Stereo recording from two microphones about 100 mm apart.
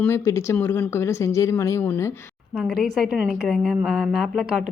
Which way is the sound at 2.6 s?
Centre (ahead or behind).